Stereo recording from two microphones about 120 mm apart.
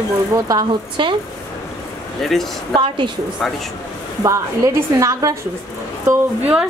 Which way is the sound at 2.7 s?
45° right (ahead or behind).